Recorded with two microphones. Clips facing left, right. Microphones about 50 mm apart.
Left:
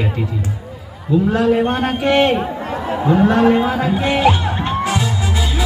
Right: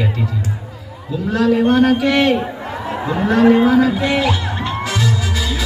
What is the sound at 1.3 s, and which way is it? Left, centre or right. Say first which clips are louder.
A man's voice: right 7 dB; left.